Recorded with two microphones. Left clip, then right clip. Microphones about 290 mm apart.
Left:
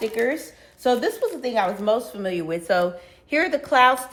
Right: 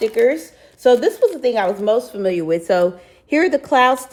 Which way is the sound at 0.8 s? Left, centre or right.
Right.